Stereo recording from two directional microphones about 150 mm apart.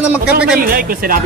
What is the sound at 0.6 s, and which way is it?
Speech, 70° right (ahead or behind).